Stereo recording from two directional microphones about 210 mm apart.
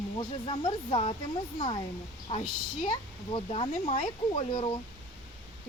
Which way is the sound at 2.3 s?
25° left (ahead or behind).